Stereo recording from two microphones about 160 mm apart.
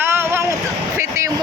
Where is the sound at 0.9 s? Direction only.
20° right (ahead or behind).